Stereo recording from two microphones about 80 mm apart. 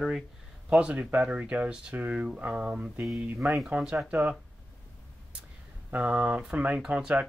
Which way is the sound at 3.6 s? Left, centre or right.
Centre.